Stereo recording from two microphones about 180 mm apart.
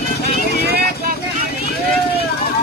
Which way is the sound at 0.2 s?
65° left (ahead or behind).